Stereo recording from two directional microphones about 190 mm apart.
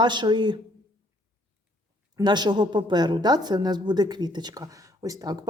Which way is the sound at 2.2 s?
20° right (ahead or behind).